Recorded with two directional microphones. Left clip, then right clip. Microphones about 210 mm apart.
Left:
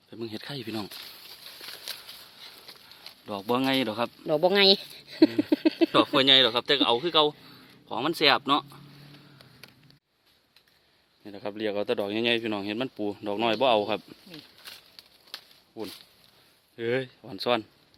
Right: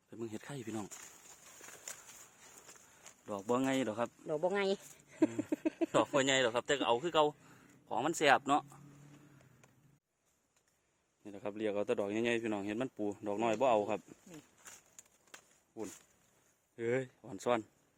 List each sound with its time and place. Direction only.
0.1 s speech: centre (ahead or behind)
1.5 s a sound: 15° left (ahead or behind)
3.2 s speech: 5° left (ahead or behind)
4.3 s speech: 45° left (ahead or behind)
5.9 s speech: centre (ahead or behind)
11.2 s speech: centre (ahead or behind)
15.3 s a sound: 5° left (ahead or behind)
16.7 s speech: 5° left (ahead or behind)